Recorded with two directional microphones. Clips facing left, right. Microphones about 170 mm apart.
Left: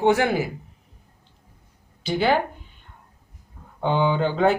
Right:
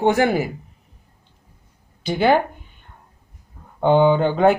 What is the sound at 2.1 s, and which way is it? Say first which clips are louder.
Speech: right 4 dB; 50° right (ahead or behind).